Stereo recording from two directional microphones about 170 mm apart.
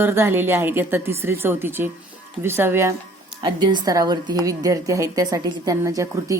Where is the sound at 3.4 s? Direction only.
25° right (ahead or behind).